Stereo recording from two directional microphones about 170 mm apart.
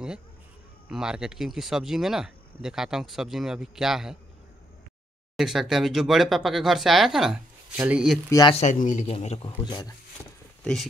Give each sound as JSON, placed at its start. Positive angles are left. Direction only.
{"t": 0.8, "sound": "speech", "side_deg": -5}
{"t": 5.3, "sound": "speech", "side_deg": 0}
{"t": 8.3, "sound": "speech", "side_deg": 20}
{"t": 8.5, "sound": "speech", "side_deg": 45}
{"t": 9.1, "sound": "speech", "side_deg": 35}
{"t": 9.7, "sound": "speech", "side_deg": 25}
{"t": 10.6, "sound": "speech", "side_deg": 5}